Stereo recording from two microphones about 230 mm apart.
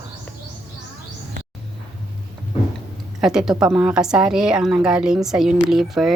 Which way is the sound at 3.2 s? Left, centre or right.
Centre.